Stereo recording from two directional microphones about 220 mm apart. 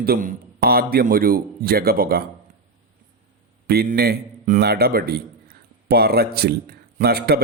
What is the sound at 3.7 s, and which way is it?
A man's voice, 45° right (ahead or behind).